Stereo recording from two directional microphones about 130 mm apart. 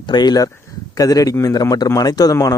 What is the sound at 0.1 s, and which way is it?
Speech, 35° left (ahead or behind).